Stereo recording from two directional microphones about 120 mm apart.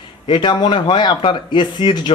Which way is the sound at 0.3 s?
40° left (ahead or behind).